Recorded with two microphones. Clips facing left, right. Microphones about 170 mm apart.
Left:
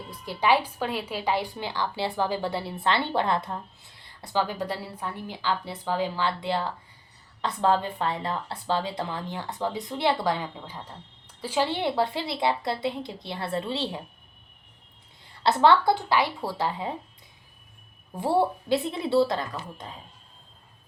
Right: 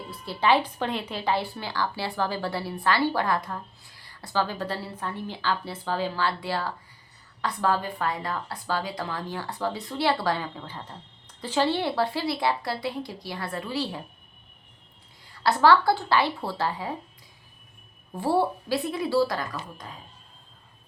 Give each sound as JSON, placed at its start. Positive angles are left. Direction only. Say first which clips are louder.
{"t": 0.1, "sound": "a woman's voice", "louder": "even", "side_deg": 15}
{"t": 15.2, "sound": "a sound", "louder": "even", "side_deg": 25}
{"t": 15.9, "sound": "speech", "louder": "even", "side_deg": 15}
{"t": 18.2, "sound": "a woman's voice", "louder": "even", "side_deg": 20}